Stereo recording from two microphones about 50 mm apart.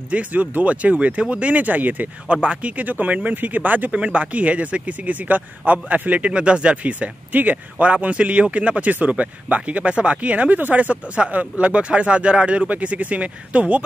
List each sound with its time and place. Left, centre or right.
0.1 s speech: right
2.2 s speech: right
2.8 s speech: right